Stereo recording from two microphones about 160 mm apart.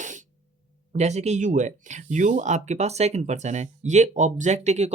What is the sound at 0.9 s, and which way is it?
Speech, 45° right (ahead or behind).